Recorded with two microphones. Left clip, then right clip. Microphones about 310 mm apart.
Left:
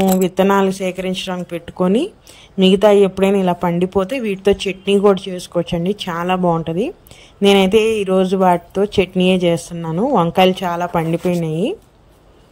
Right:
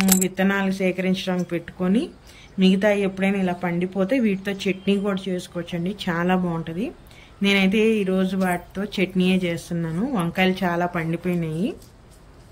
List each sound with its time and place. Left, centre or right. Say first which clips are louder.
0.2 s speech: left 9 dB; centre